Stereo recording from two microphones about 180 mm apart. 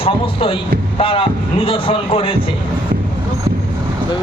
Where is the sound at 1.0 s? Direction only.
30° left (ahead or behind).